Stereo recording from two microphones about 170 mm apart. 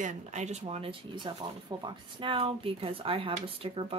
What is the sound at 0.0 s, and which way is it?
Speech, 45° right (ahead or behind).